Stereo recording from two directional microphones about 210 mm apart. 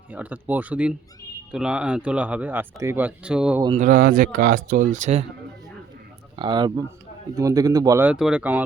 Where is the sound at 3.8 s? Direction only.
45° right (ahead or behind).